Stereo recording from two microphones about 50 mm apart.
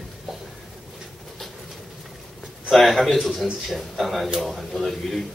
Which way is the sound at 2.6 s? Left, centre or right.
Centre.